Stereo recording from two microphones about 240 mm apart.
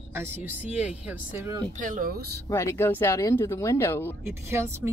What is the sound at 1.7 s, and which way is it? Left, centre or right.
Speech, right.